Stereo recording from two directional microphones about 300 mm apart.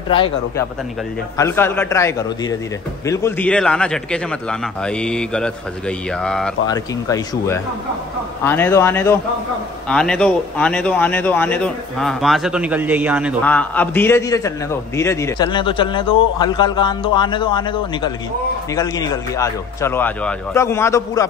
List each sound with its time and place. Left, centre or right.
0.1 s a man's voice: centre